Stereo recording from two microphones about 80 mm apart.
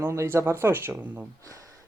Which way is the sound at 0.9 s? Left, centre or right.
Centre.